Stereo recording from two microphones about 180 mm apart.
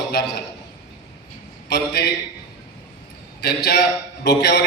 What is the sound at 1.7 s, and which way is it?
Speech, 65° left (ahead or behind).